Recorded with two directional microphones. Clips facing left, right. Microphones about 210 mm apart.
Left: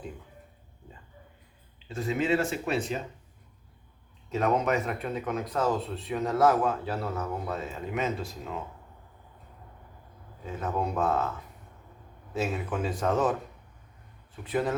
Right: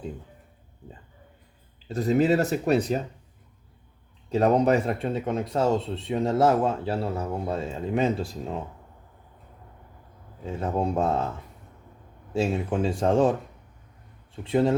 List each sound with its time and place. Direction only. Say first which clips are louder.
1.9 s speech: right 6 dB; 40° right (ahead or behind)
4.3 s speech: right 6 dB; 35° right (ahead or behind)
10.4 s speech: right 4 dB; 30° right (ahead or behind)
12.3 s speech: right 5 dB; 30° right (ahead or behind)
14.4 s speech: right 6 dB; 25° right (ahead or behind)